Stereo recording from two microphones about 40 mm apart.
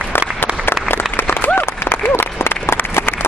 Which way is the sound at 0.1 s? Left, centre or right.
Left.